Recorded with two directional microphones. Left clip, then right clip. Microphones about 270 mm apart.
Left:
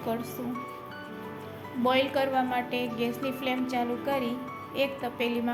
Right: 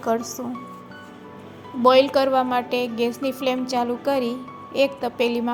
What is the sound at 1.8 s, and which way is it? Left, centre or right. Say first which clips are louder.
A woman's voice: right 10 dB; right.